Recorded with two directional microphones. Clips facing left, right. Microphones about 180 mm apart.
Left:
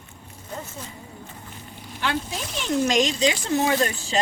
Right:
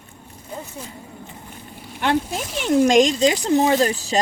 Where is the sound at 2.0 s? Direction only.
50° right (ahead or behind).